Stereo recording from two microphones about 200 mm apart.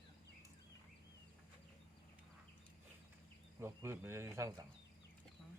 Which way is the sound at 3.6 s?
10° right (ahead or behind).